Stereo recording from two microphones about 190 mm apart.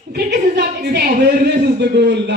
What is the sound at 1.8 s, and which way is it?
Speech, 65° right (ahead or behind).